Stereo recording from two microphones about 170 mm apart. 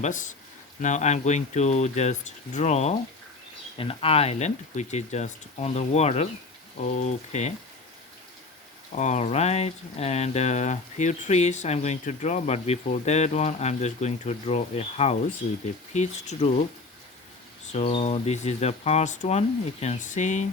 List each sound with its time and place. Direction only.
0.0 s speech: 50° left (ahead or behind)
8.9 s speech: 45° left (ahead or behind)
17.7 s speech: 35° left (ahead or behind)